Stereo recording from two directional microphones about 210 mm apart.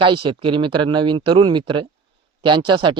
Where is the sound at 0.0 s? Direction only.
25° right (ahead or behind).